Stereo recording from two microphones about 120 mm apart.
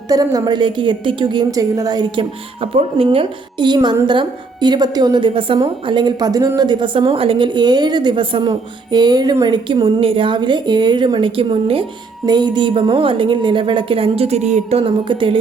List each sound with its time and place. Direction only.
0.1 s a woman's voice: 30° right (ahead or behind)
2.7 s a woman's voice: 50° right (ahead or behind)
12.2 s a woman's voice: 35° right (ahead or behind)